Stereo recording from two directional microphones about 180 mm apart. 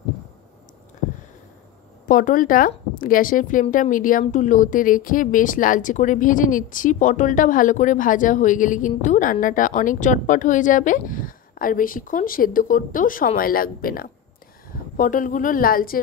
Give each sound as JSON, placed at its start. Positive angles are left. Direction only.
{"t": 2.0, "sound": "speech", "side_deg": 50}